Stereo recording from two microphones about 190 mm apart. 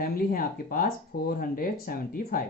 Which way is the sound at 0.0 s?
50° left (ahead or behind).